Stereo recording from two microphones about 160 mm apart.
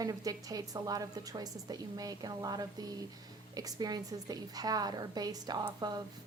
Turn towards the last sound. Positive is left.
turn(degrees=-25)  # may be behind; listen again after turning